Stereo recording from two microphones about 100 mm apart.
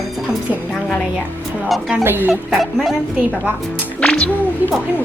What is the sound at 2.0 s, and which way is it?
Speech, 20° right (ahead or behind).